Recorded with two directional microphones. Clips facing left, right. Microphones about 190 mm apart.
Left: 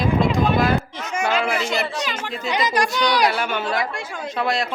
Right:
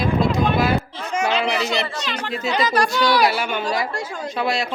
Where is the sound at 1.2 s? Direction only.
10° left (ahead or behind).